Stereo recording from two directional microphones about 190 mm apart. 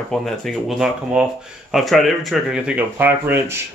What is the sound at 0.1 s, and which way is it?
Speech, centre (ahead or behind).